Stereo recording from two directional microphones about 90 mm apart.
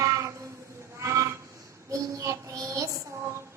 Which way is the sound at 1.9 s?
35° right (ahead or behind).